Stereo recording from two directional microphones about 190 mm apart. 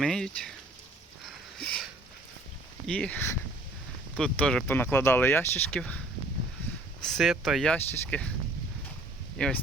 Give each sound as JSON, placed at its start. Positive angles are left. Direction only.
{"t": 0.0, "sound": "speech", "side_deg": 0}
{"t": 1.2, "sound": "a sound", "side_deg": 5}
{"t": 2.8, "sound": "speech", "side_deg": 5}
{"t": 7.0, "sound": "speech", "side_deg": 0}
{"t": 9.4, "sound": "speech", "side_deg": 5}